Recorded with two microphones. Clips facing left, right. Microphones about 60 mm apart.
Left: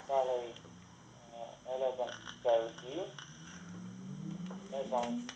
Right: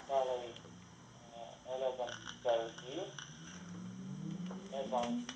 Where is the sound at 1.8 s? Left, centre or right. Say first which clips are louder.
Left 3 dB; centre.